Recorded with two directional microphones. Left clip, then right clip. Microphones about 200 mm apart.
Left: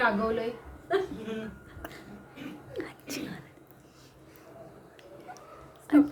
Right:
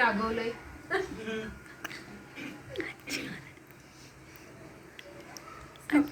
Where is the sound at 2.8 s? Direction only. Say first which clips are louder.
Right 2 dB; 35° left (ahead or behind).